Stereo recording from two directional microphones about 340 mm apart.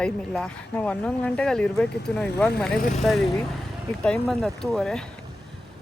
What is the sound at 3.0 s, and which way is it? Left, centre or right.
Speech, centre.